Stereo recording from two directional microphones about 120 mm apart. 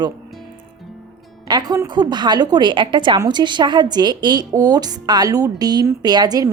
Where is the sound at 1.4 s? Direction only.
35° right (ahead or behind).